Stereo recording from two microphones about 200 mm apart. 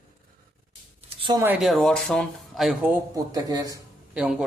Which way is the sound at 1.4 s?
5° right (ahead or behind).